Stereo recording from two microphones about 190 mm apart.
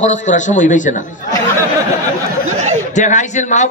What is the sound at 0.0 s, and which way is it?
A man's voice, 40° left (ahead or behind).